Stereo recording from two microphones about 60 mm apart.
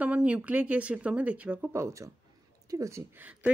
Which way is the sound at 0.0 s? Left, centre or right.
Right.